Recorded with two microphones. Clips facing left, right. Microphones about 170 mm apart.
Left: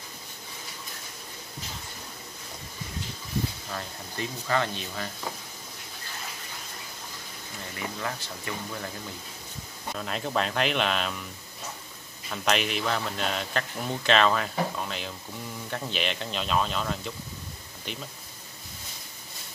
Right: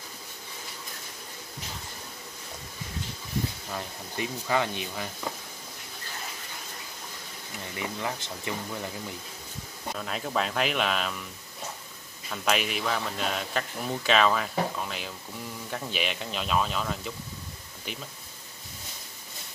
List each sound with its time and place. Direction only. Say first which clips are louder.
3.7 s speech: right 1 dB; 15° right (ahead or behind)
7.7 s speech: right 1 dB; 20° right (ahead or behind)
9.9 s speech: left 1 dB; centre (ahead or behind)
12.3 s speech: left 1 dB; 5° right (ahead or behind)